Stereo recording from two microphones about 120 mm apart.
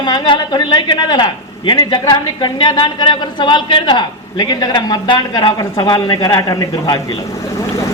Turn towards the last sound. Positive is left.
turn(degrees=30)  # may be behind; listen again after turning